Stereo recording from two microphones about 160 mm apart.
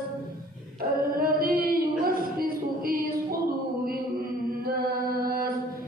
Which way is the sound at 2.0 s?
65° right (ahead or behind).